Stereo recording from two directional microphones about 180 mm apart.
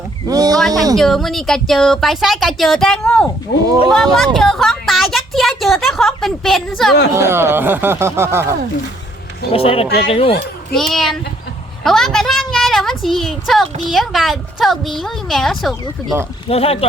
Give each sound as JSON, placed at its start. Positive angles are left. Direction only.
{"t": 0.3, "sound": "a sound", "side_deg": -20}
{"t": 0.7, "sound": "speech", "side_deg": -20}
{"t": 0.9, "sound": "a woman's voice", "side_deg": 0}
{"t": 7.1, "sound": "speech", "side_deg": -15}
{"t": 9.5, "sound": "speech", "side_deg": 30}
{"t": 10.8, "sound": "a woman's voice", "side_deg": 0}
{"t": 16.5, "sound": "speech", "side_deg": 30}